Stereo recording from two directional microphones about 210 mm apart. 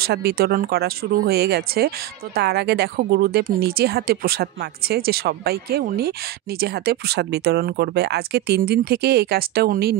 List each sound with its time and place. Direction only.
0.0 s speech: 50° right (ahead or behind)